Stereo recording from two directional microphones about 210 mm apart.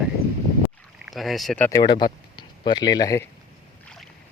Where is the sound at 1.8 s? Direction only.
20° left (ahead or behind).